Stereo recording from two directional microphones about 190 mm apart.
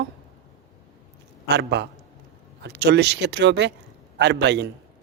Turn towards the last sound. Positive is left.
turn(degrees=-65)  # may be behind; listen again after turning